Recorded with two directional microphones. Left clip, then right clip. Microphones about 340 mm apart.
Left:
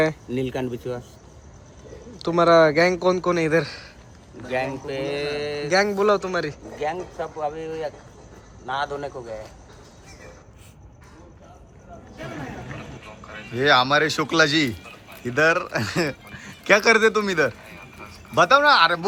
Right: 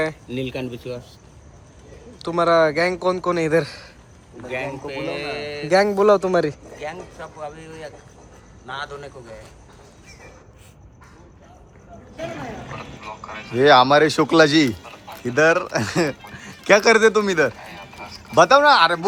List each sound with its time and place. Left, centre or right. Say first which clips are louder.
0.0 s speech: left 2 dB; centre
2.1 s a man's voice: left 1 dB; centre
4.4 s speech: left 1 dB; left
5.6 s speech: right 4 dB; centre
6.7 s speech: left 5 dB; left
13.2 s speech: right 5 dB; centre